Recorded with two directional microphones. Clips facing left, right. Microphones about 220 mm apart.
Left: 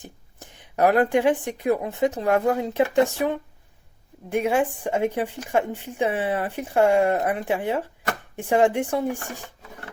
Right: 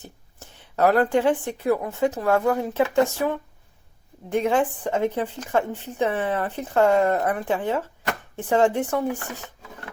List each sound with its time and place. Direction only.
0.0 s a woman's voice: 15° left (ahead or behind)